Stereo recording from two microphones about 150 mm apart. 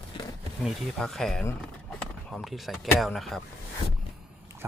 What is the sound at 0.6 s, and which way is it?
Speech, centre (ahead or behind).